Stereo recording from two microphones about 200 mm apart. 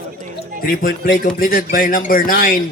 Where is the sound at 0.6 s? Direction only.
45° left (ahead or behind).